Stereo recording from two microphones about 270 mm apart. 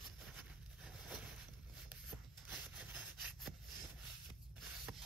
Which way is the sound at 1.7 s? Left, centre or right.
Centre.